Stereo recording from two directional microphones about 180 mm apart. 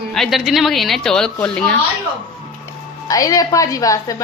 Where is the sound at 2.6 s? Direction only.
20° left (ahead or behind).